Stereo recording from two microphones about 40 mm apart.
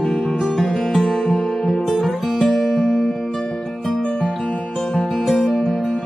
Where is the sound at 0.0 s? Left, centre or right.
Centre.